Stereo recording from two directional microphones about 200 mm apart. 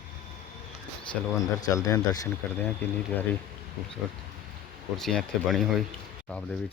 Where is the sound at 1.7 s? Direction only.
15° left (ahead or behind).